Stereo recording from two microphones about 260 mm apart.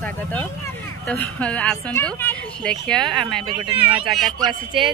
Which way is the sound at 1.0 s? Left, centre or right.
Centre.